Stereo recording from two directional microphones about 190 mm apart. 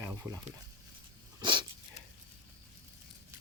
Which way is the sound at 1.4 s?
25° right (ahead or behind).